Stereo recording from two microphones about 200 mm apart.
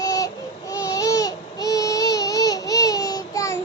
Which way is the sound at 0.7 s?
15° left (ahead or behind).